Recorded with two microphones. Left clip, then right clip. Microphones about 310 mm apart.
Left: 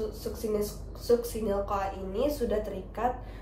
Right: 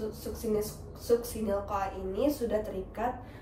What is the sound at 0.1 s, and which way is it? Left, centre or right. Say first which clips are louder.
A woman's voice: left 1 dB; centre.